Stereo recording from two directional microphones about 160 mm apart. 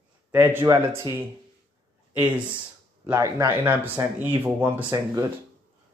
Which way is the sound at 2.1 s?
10° right (ahead or behind).